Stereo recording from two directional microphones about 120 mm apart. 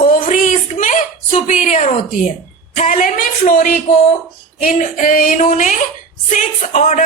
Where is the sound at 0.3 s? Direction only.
90° left.